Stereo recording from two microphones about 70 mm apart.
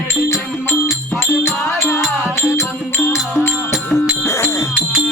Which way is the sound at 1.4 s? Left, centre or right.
Left.